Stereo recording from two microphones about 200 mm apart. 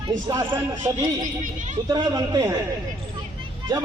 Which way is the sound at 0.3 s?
15° right (ahead or behind).